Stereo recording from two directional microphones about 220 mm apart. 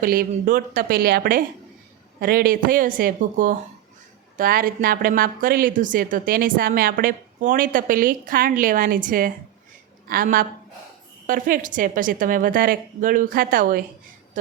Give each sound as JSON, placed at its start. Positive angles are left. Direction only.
{"t": 0.0, "sound": "a woman's voice", "side_deg": -40}